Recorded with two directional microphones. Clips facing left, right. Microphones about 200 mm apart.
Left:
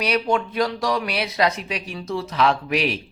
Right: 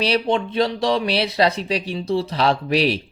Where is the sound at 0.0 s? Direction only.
30° right (ahead or behind).